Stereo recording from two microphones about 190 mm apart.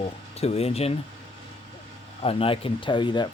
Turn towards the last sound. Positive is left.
turn(degrees=25)  # may be behind; listen again after turning